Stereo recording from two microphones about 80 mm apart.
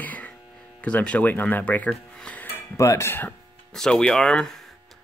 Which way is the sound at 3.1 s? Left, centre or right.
Left.